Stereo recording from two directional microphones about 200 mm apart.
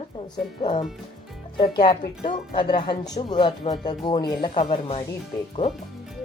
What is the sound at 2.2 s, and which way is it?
Speech, 25° left (ahead or behind).